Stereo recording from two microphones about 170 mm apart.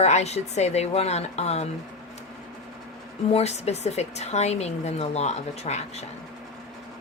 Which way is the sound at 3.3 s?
40° left (ahead or behind).